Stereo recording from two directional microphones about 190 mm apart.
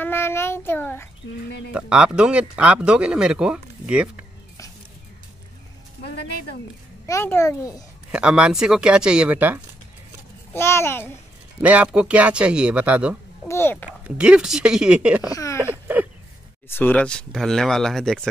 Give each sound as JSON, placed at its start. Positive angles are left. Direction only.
{"t": 0.0, "sound": "child singing", "side_deg": 10}
{"t": 0.7, "sound": "a child's voice", "side_deg": 10}
{"t": 1.7, "sound": "speech", "side_deg": -5}
{"t": 7.1, "sound": "a child's voice", "side_deg": 15}
{"t": 8.1, "sound": "speech", "side_deg": -5}
{"t": 10.5, "sound": "a child's voice", "side_deg": 15}
{"t": 11.6, "sound": "speech", "side_deg": -5}
{"t": 13.5, "sound": "a child's voice", "side_deg": 10}
{"t": 14.0, "sound": "speech", "side_deg": -5}
{"t": 15.3, "sound": "speech", "side_deg": 15}
{"t": 16.6, "sound": "speech", "side_deg": 10}